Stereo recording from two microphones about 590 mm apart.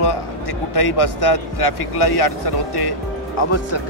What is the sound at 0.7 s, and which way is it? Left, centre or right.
Speech, left.